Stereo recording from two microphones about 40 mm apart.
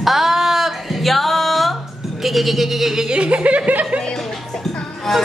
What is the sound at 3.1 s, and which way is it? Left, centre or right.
Speech, right.